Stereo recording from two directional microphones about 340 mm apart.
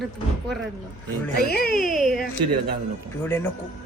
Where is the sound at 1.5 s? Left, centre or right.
Left.